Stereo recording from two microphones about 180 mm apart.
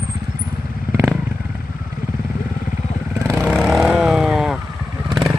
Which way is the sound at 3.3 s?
5° left (ahead or behind).